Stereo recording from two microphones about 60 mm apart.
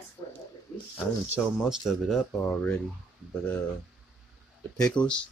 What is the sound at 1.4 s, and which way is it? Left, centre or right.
Speech, centre.